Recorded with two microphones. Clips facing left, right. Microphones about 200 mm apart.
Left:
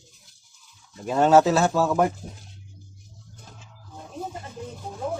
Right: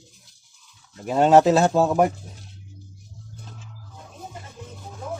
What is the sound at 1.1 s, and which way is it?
Speech, 15° right (ahead or behind).